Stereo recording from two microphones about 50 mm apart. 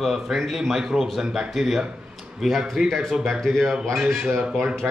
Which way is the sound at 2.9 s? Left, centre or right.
Centre.